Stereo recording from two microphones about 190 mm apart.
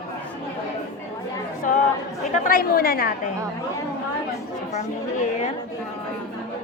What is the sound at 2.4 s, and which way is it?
Speech, 50° left (ahead or behind).